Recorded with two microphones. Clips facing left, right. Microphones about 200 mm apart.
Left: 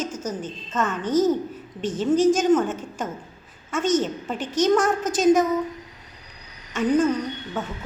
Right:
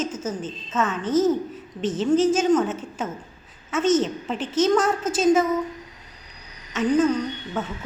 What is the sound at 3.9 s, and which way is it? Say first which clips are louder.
A woman's voice: right 2 dB; 10° left (ahead or behind).